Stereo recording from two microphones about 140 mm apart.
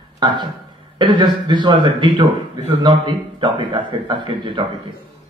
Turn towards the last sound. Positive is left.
turn(degrees=-35)  # may be behind; listen again after turning